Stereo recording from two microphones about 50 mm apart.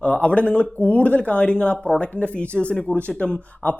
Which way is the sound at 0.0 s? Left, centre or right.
Left.